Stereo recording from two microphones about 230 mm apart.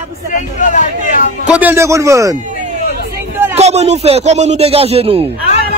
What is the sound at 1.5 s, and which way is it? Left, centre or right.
Speech, centre.